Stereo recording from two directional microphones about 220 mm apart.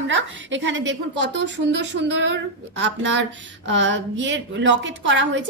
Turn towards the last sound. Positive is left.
turn(degrees=-55)  # may be behind; listen again after turning